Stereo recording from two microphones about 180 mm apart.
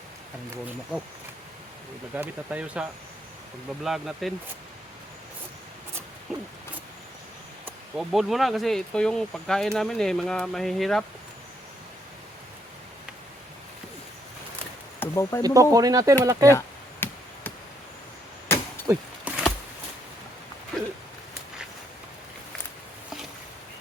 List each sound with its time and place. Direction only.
2.1 s speech: 10° right (ahead or behind)
3.8 s speech: centre (ahead or behind)
6.3 s speech: centre (ahead or behind)
7.6 s speech: centre (ahead or behind)
14.9 s a sound: 15° left (ahead or behind)
15.4 s speech: 20° right (ahead or behind)
16.5 s chop: 15° left (ahead or behind)
18.4 s arrow: 10° left (ahead or behind)
18.9 s a sound: 10° right (ahead or behind)